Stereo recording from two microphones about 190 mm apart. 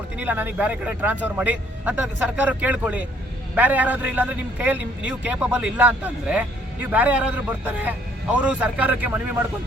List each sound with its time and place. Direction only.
0.2 s a man's voice: 10° right (ahead or behind)